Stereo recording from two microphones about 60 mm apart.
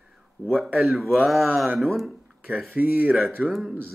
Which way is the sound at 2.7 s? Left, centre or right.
Right.